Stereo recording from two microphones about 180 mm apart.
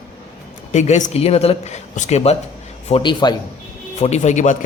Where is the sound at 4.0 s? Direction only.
40° left (ahead or behind).